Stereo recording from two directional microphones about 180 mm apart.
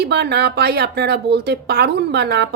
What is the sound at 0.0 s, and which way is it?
A woman's voice, 65° right (ahead or behind).